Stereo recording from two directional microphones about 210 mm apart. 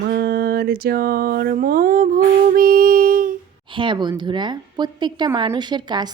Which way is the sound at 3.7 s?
20° right (ahead or behind).